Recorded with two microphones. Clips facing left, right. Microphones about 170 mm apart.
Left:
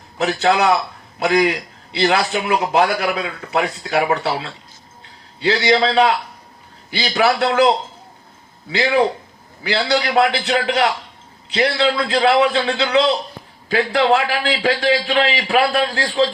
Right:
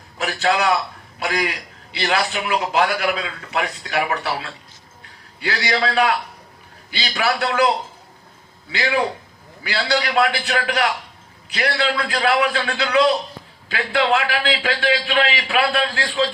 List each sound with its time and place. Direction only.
0.2 s a man's voice: 25° left (ahead or behind)
7.2 s a man's voice: 25° left (ahead or behind)
8.7 s a man's voice: 20° left (ahead or behind)
13.9 s a man's voice: 35° left (ahead or behind)